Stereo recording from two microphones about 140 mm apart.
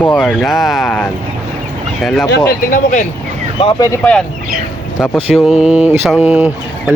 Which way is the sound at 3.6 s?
35° left (ahead or behind).